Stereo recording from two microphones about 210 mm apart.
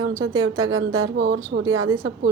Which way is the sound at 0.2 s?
85° right.